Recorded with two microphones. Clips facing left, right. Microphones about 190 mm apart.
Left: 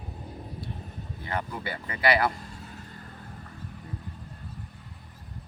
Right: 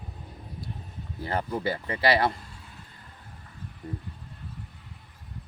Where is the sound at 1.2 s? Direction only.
35° right (ahead or behind).